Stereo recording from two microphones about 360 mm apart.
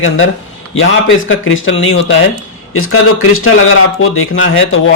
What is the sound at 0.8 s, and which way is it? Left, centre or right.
Speech, left.